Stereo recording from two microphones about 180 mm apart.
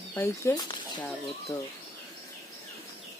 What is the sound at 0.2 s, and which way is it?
Speech, 15° left (ahead or behind).